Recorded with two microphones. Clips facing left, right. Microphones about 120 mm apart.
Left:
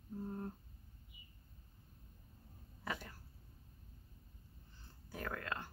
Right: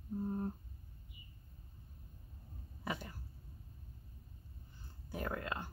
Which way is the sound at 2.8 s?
20° right (ahead or behind).